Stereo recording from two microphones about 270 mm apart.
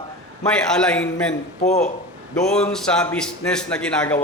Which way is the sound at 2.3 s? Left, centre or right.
Centre.